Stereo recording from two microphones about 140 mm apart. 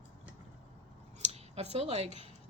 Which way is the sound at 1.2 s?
55° right (ahead or behind).